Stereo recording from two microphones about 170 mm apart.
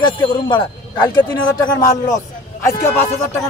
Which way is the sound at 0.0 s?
30° left (ahead or behind).